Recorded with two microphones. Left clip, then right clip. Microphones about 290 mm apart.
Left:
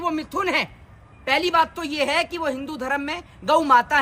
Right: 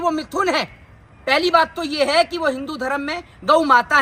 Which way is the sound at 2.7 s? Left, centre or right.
Centre.